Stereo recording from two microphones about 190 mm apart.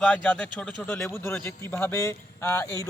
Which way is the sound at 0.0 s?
5° left (ahead or behind).